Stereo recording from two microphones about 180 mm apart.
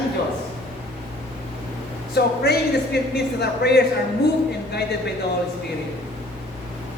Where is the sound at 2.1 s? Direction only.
60° left (ahead or behind).